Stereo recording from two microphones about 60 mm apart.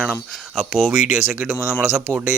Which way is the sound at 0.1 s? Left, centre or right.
Centre.